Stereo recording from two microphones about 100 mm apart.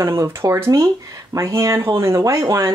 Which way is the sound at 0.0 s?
25° right (ahead or behind).